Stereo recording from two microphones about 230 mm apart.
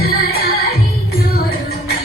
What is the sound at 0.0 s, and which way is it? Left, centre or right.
Music, left.